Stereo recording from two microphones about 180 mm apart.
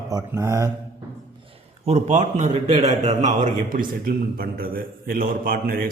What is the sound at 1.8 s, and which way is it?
A man's voice, 40° right (ahead or behind).